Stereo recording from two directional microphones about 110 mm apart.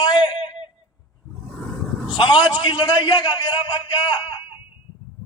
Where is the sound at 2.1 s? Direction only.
50° left (ahead or behind).